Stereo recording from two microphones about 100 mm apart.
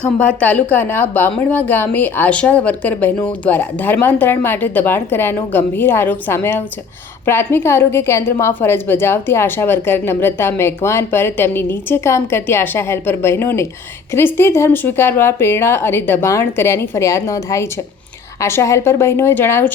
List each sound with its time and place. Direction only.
0.0 s a woman's voice: 10° left (ahead or behind)